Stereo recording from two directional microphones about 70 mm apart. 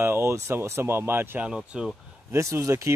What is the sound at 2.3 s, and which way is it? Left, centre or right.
Speech, right.